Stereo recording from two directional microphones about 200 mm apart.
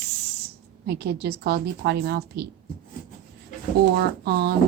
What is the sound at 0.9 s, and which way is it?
A woman's voice, 55° right (ahead or behind).